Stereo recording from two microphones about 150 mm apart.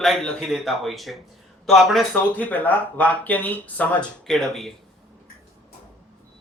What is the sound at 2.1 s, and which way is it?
Speech, 10° left (ahead or behind).